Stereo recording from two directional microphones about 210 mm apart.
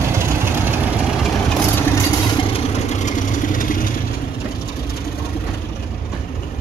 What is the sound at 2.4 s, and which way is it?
Vehicle, 30° left (ahead or behind).